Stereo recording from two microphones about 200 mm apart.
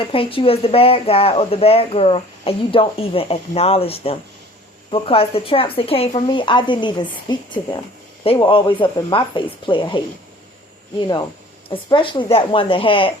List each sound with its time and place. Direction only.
0.0 s speech: 25° left (ahead or behind)
11.7 s speech: 25° left (ahead or behind)